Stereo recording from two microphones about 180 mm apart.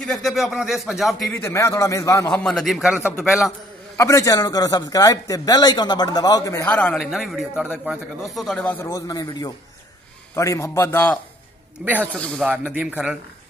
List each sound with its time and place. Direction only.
0.0 s a man's voice: centre (ahead or behind)
1.3 s a man's voice: 15° left (ahead or behind)
2.3 s a man's voice: centre (ahead or behind)
3.9 s a man's voice: 15° left (ahead or behind)
6.7 s a man's voice: 5° left (ahead or behind)
11.8 s a man's voice: 5° right (ahead or behind)
12.4 s a man's voice: 10° right (ahead or behind)